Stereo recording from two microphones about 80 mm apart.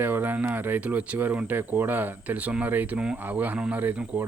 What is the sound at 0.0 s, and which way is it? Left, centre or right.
A man's voice, right.